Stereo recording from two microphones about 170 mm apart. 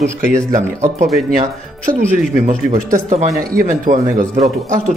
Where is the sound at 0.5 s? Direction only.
45° right (ahead or behind).